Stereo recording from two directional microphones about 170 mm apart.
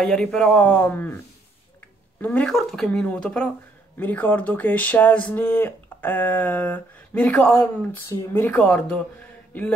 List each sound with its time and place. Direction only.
0.0 s speech: 5° left (ahead or behind)
2.2 s speech: 5° left (ahead or behind)